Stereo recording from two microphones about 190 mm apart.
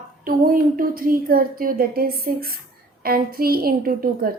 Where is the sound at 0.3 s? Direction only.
50° right (ahead or behind).